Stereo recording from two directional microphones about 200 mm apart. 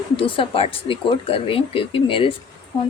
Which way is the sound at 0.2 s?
25° left (ahead or behind).